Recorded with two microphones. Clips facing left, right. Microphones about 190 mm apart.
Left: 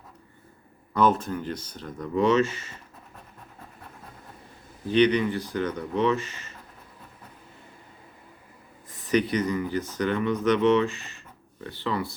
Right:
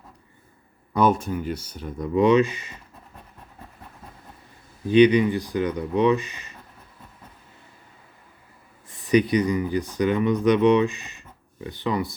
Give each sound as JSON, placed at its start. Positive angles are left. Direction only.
{"t": 0.9, "sound": "speech", "side_deg": -15}
{"t": 4.9, "sound": "speech", "side_deg": -10}
{"t": 9.0, "sound": "speech", "side_deg": -15}